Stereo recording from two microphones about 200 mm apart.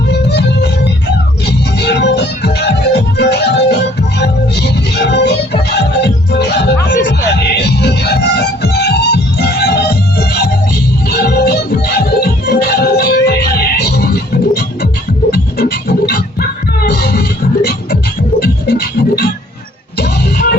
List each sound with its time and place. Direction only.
0.1 s music: 60° left (ahead or behind)
15.3 s music: 50° left (ahead or behind)